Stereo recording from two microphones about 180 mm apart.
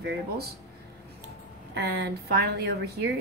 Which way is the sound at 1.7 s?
65° right (ahead or behind).